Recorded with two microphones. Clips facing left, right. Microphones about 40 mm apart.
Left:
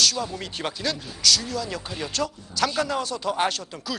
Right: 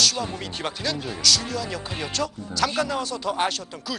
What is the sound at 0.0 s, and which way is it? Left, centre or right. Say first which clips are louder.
Speech: even; centre.